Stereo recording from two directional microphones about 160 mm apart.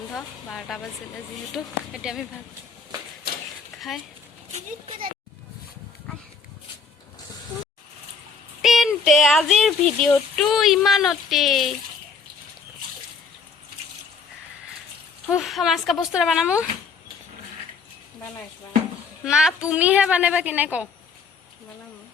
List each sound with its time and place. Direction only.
0.1 s speech: centre (ahead or behind)
3.8 s speech: centre (ahead or behind)
4.5 s speech: 35° right (ahead or behind)
8.6 s a sound: centre (ahead or behind)
10.3 s speech: centre (ahead or behind)
15.3 s speech: centre (ahead or behind)
19.2 s a woman's voice: 5° right (ahead or behind)